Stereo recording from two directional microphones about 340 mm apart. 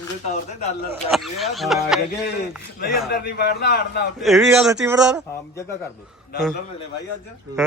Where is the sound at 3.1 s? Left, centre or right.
Left.